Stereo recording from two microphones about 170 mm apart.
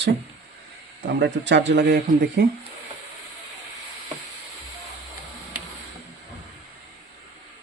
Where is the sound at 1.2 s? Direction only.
90° right; by 2.5 s 70° right (ahead or behind).